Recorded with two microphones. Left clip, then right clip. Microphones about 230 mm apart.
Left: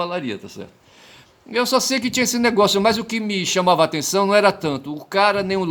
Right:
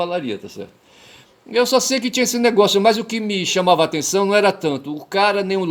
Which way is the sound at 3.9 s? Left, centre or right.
Left.